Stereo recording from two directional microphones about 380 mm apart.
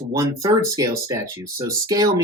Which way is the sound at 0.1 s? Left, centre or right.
Centre.